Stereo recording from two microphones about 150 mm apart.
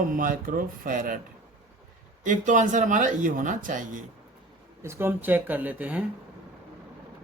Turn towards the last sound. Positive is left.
turn(degrees=-10)  # may be behind; listen again after turning